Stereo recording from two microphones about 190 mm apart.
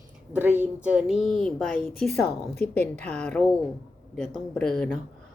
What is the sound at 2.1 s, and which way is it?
A woman's voice, 5° left (ahead or behind).